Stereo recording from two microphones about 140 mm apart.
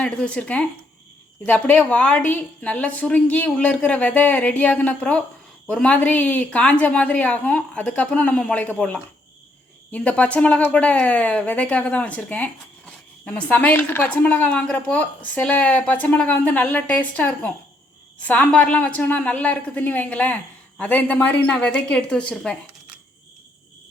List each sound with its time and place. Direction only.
0.0 s a woman's voice: 5° left (ahead or behind)